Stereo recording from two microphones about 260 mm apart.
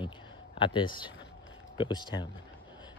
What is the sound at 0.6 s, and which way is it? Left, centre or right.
Speech, centre.